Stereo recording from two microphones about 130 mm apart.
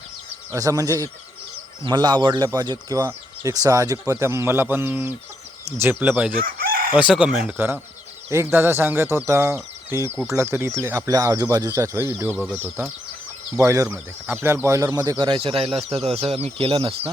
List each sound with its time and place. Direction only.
0.5 s speech: 25° right (ahead or behind); by 7.5 s 5° right (ahead or behind)
7.5 s speech: 15° right (ahead or behind)
13.8 s speech: 15° right (ahead or behind)
15.2 s speech: 40° right (ahead or behind)